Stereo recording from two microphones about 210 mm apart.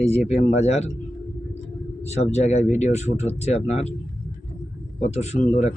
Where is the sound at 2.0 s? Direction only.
30° left (ahead or behind).